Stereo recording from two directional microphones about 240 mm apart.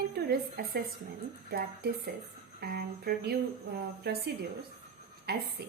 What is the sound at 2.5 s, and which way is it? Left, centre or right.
A woman's voice, right.